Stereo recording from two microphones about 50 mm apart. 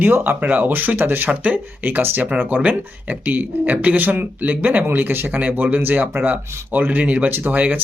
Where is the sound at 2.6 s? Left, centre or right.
Right.